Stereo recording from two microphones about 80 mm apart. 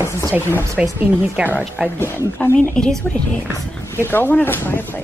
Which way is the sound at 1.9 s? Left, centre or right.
Left.